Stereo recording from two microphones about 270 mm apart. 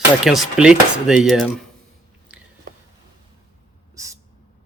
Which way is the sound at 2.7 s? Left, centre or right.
Right.